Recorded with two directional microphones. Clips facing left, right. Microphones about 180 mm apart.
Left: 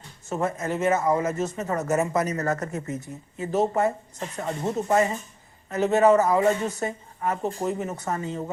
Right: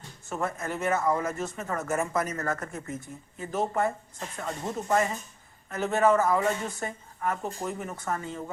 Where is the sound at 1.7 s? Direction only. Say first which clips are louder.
Left 4 dB; 40° left (ahead or behind).